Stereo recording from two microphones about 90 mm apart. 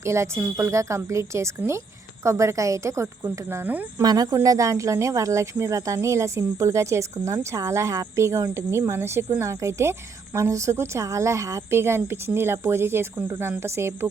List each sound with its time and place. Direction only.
0.0 s speech: 30° right (ahead or behind)
4.0 s speech: 45° right (ahead or behind); by 14.1 s 30° right (ahead or behind)